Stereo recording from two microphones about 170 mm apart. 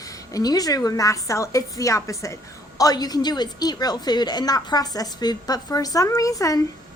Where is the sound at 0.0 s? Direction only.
20° left (ahead or behind).